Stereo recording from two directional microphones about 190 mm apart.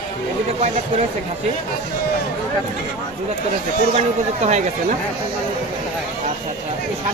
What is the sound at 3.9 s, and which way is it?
Speech, 35° right (ahead or behind).